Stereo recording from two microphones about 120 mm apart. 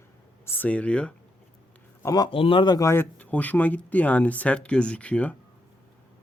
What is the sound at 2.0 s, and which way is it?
Speech, 30° left (ahead or behind).